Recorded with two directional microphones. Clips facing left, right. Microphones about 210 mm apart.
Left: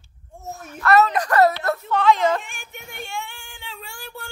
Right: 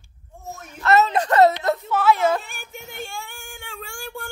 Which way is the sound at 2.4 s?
35° right (ahead or behind).